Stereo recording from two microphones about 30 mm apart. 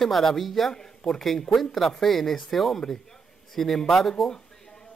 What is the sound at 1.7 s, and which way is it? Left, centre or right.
A man's voice, centre.